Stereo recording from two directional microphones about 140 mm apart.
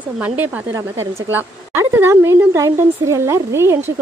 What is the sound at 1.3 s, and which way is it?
A woman's voice, 15° right (ahead or behind).